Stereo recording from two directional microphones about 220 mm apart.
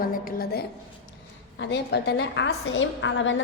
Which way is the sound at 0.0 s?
40° left (ahead or behind).